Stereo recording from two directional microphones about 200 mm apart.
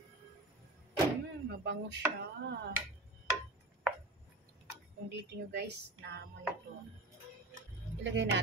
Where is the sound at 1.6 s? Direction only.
60° right (ahead or behind).